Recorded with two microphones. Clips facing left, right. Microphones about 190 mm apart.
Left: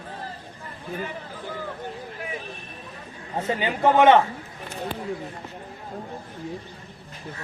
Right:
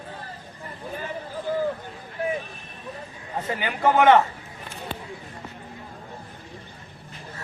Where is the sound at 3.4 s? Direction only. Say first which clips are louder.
Left 2 dB; 25° left (ahead or behind).